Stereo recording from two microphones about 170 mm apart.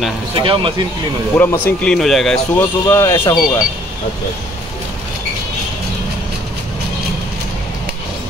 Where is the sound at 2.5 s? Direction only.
15° left (ahead or behind).